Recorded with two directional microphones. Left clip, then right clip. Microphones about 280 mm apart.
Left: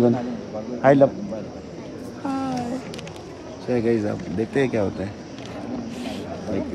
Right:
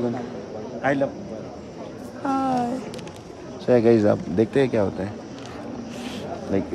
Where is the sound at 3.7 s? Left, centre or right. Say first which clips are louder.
Right 6 dB; centre.